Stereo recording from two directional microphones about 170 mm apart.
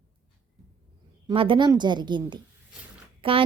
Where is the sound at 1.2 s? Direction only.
30° right (ahead or behind).